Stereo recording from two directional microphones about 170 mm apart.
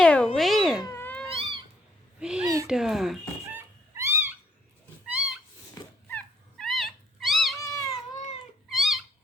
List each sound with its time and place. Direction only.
0.0 s cat: 5° left (ahead or behind)
0.8 s cat: 15° left (ahead or behind)
1.3 s cat: 30° right (ahead or behind)
2.1 s a sound: 5° right (ahead or behind)
2.6 s speech: 5° right (ahead or behind)
3.9 s cat: 15° right (ahead or behind)
6.1 s dog: 5° left (ahead or behind)
7.6 s cat: 20° left (ahead or behind)
8.7 s cat: centre (ahead or behind)